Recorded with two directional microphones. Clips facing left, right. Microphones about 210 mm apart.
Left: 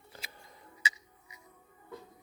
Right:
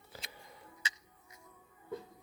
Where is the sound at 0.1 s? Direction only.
5° right (ahead or behind).